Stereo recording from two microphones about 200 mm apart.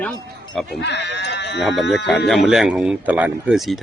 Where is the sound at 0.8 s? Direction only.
60° left (ahead or behind).